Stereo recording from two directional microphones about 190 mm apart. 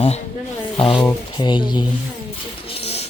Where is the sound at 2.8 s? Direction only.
30° left (ahead or behind).